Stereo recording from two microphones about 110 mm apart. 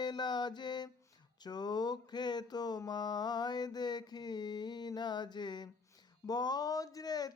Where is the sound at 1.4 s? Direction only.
40° left (ahead or behind).